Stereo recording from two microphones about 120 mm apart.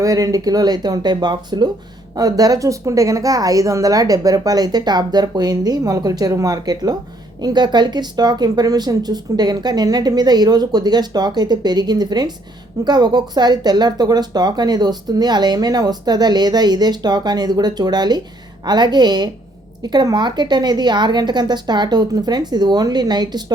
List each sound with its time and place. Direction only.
0.0 s speech: 30° right (ahead or behind)